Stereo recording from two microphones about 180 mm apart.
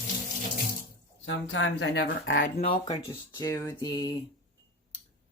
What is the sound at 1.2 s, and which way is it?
Speech, 90° left.